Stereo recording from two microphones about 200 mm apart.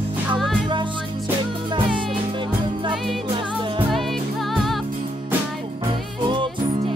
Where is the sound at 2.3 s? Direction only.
25° right (ahead or behind).